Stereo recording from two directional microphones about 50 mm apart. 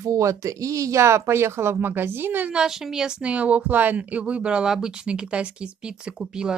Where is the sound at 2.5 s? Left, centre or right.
Centre.